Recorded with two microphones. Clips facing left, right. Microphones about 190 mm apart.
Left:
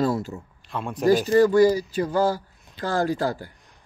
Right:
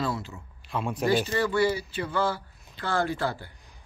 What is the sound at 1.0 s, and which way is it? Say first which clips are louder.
Speech: left 8 dB; 40° left (ahead or behind).